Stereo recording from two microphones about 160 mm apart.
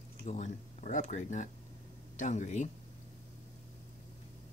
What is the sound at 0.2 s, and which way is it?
Speech, 50° left (ahead or behind).